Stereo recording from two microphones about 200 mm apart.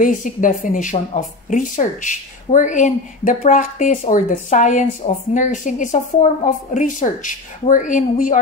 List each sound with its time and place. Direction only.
0.0 s speech: 40° left (ahead or behind)